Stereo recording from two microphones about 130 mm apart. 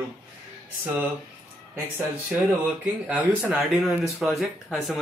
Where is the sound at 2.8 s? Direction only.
10° right (ahead or behind).